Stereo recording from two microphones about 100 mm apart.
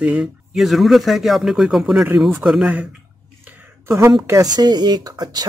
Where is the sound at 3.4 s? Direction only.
25° right (ahead or behind).